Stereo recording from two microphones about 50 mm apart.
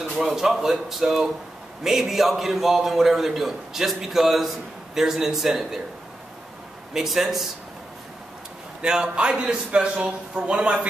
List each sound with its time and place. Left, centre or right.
0.2 s a man's voice: centre
6.9 s speech: centre
8.8 s a man's voice: centre